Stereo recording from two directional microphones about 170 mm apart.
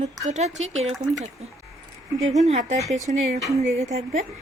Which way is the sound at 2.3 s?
40° right (ahead or behind).